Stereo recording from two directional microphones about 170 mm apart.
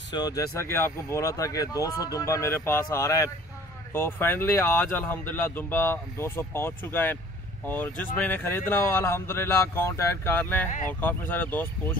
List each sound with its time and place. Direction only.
0.1 s speech: 20° left (ahead or behind)